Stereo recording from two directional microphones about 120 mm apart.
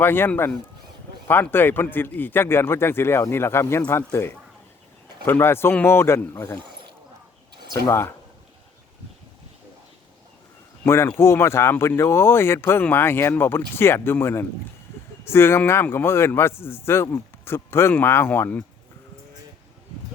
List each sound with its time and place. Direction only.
0.0 s speech: 15° left (ahead or behind)
7.7 s speech: 25° left (ahead or behind)
10.8 s speech: 20° left (ahead or behind)